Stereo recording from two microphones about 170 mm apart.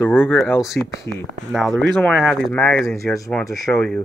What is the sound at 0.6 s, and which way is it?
Speech, centre (ahead or behind).